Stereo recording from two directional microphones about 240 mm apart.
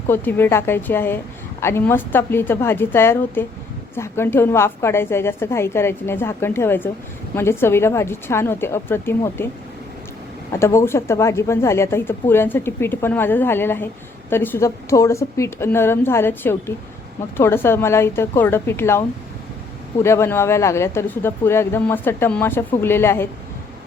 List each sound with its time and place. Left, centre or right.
0.1 s speech: centre
10.5 s speech: centre